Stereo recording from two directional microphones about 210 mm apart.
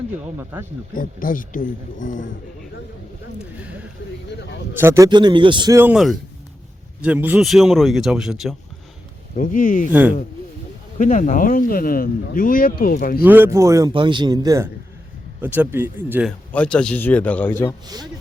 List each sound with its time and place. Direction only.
0.3 s a man's voice: 10° right (ahead or behind)
0.9 s speech: 40° left (ahead or behind)
4.4 s a sound: 55° left (ahead or behind)
4.7 s a man's voice: 10° right (ahead or behind)
9.3 s speech: 40° left (ahead or behind)
10.9 s speech: 35° left (ahead or behind)
13.2 s a man's voice: 10° right (ahead or behind)
16.5 s a man's voice: 5° left (ahead or behind)
17.8 s speech: 20° right (ahead or behind)